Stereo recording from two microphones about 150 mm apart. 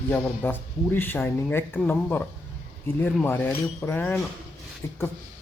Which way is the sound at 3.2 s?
15° left (ahead or behind).